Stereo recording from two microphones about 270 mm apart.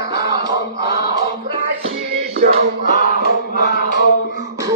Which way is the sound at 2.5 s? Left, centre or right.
Right.